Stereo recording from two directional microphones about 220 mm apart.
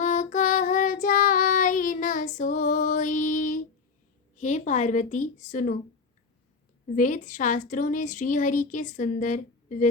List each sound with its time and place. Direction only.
0.0 s child singing: 30° left (ahead or behind)
4.4 s speech: 35° left (ahead or behind)
6.9 s speech: 35° left (ahead or behind)